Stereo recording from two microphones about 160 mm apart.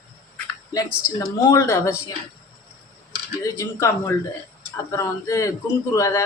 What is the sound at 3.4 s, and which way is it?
Speech, 20° left (ahead or behind).